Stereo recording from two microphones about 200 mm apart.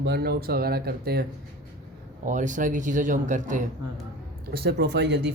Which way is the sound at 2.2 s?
40° right (ahead or behind).